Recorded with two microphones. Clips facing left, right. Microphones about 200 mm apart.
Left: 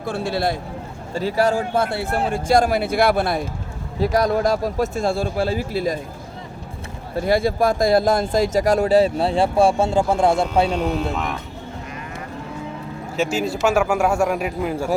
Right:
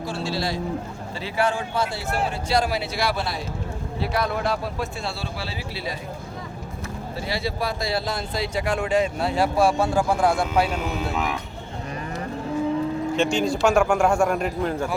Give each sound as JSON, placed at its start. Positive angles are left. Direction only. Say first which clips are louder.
{"t": 0.0, "sound": "a man's voice", "louder": "left 5 dB", "side_deg": 55}
{"t": 1.1, "sound": "a man's voice", "louder": "left 6 dB", "side_deg": 40}
{"t": 4.0, "sound": "a man's voice", "louder": "left 7 dB", "side_deg": 40}
{"t": 7.2, "sound": "speech", "louder": "left 10 dB", "side_deg": 50}
{"t": 10.7, "sound": "a man's voice", "louder": "left 5 dB", "side_deg": -5}
{"t": 13.1, "sound": "a man's voice", "louder": "left 2 dB", "side_deg": 5}